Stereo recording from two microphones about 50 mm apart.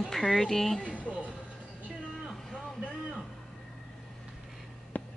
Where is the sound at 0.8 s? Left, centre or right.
Left.